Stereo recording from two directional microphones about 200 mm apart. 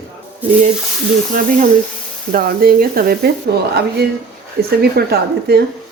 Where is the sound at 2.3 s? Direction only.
50° right (ahead or behind).